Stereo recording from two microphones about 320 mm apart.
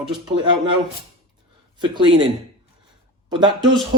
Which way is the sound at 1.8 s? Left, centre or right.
Centre.